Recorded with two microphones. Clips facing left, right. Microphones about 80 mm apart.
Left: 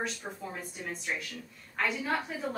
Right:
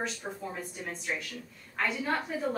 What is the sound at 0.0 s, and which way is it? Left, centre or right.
A woman's voice, centre.